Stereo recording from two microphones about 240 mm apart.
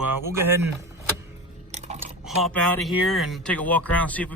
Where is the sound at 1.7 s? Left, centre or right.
Right.